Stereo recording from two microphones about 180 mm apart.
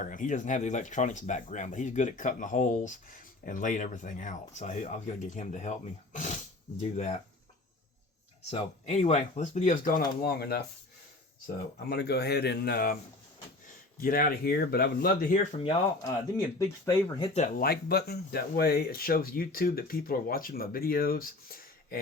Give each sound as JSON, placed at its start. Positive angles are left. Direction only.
{"t": 0.0, "sound": "speech", "side_deg": 45}
{"t": 6.9, "sound": "speech", "side_deg": 40}
{"t": 8.4, "sound": "speech", "side_deg": 35}
{"t": 11.9, "sound": "speech", "side_deg": 65}
{"t": 14.0, "sound": "speech", "side_deg": 55}
{"t": 15.5, "sound": "speech", "side_deg": 30}
{"t": 16.6, "sound": "speech", "side_deg": 20}
{"t": 17.2, "sound": "speech", "side_deg": 40}
{"t": 17.6, "sound": "speech", "side_deg": 60}